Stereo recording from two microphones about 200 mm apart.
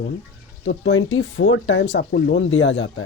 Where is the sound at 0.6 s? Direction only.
65° left (ahead or behind).